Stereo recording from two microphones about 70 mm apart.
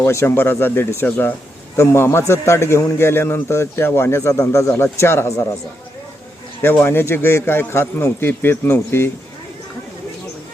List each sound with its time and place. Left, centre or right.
0.0 s a man's voice: left
6.6 s a man's voice: left